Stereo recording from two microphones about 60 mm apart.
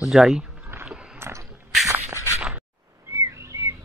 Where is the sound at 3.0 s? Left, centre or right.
Right.